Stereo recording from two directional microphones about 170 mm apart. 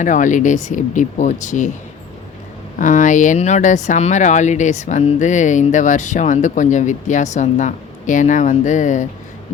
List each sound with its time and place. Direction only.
0.0 s speech: 45° left (ahead or behind)
2.7 s speech: 50° left (ahead or behind)